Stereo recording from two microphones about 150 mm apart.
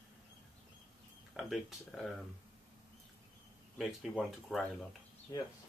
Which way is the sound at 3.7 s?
Centre (ahead or behind).